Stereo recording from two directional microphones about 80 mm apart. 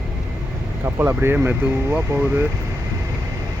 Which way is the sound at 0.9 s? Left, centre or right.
Right.